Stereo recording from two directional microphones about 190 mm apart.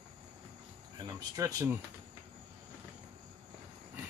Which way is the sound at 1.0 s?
20° right (ahead or behind).